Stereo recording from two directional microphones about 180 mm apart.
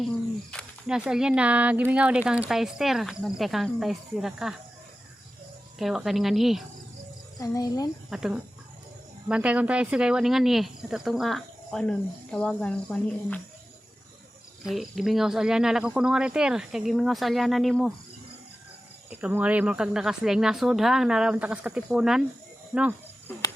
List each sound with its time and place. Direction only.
0.5 s speech: 5° right (ahead or behind)
5.8 s speech: centre (ahead or behind)
7.3 s speech: 20° left (ahead or behind)
8.1 s speech: 5° right (ahead or behind)
14.6 s speech: centre (ahead or behind)
19.1 s speech: 10° right (ahead or behind)